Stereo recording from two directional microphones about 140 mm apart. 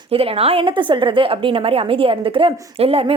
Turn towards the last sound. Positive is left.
turn(degrees=-45)  # may be behind; listen again after turning